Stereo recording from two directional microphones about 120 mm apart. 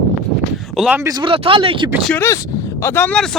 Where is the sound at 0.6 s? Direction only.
Centre (ahead or behind).